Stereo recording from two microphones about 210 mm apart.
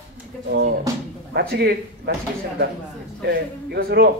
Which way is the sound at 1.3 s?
50° right (ahead or behind).